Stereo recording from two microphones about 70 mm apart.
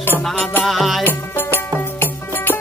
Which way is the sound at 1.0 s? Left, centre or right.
Left.